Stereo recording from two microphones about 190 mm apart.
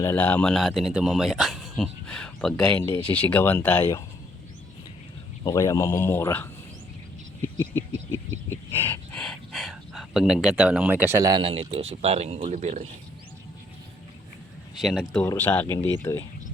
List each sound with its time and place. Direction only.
0.0 s a man's voice: 10° left (ahead or behind)
5.4 s speech: 20° left (ahead or behind)
8.8 s speech: 5° left (ahead or behind); by 12.9 s 35° right (ahead or behind)
14.8 s a man's voice: centre (ahead or behind)